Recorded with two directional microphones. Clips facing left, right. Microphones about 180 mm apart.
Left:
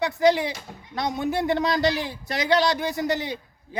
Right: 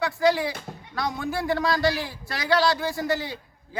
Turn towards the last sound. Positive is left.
turn(degrees=20)  # may be behind; listen again after turning